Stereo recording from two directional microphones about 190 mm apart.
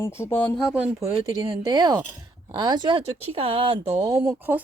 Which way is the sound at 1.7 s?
20° right (ahead or behind).